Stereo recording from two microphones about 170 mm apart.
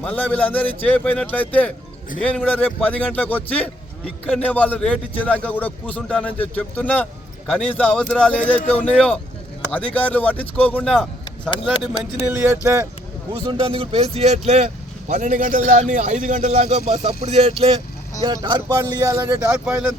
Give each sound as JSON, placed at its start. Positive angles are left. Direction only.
{"t": 0.0, "sound": "a man's voice", "side_deg": 10}
{"t": 12.2, "sound": "speech", "side_deg": -10}
{"t": 13.3, "sound": "a man's voice", "side_deg": -30}